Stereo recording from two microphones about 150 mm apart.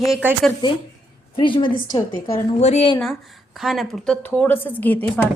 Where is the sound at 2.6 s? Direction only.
50° left (ahead or behind).